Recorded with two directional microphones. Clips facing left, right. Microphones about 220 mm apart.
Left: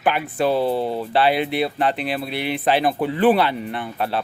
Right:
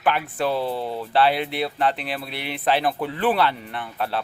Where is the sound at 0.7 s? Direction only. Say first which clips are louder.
Left 5 dB; 30° left (ahead or behind).